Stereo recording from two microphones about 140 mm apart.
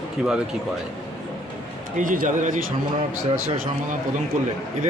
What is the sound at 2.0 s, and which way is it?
Speech, 65° right (ahead or behind).